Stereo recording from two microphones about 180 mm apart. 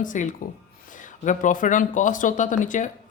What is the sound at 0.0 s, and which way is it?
Speech, 45° left (ahead or behind).